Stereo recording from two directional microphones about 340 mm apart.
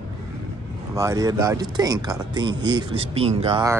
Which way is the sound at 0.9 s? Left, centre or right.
Centre.